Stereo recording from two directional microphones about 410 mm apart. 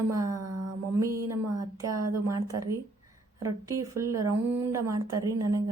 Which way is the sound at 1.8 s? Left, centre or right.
Right.